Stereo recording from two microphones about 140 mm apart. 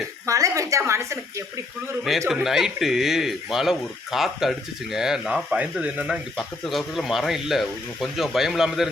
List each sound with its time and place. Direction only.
0.3 s a woman's voice: 25° right (ahead or behind)
2.3 s speech: centre (ahead or behind)